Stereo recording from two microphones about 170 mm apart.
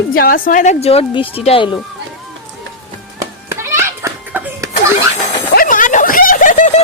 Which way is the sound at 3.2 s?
15° right (ahead or behind).